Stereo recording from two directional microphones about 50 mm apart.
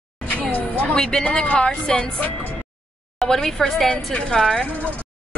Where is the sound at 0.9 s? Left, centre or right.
Centre.